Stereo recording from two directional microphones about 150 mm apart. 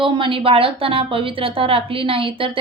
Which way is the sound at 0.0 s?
35° right (ahead or behind).